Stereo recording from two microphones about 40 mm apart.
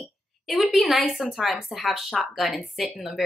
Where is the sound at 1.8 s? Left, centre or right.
Centre.